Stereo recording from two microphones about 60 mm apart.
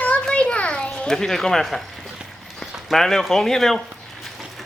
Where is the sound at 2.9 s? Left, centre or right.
Centre.